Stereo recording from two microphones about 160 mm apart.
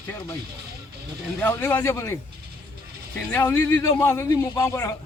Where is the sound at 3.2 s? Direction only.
15° left (ahead or behind).